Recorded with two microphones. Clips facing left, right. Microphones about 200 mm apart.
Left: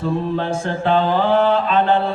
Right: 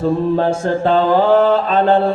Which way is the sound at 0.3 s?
45° right (ahead or behind).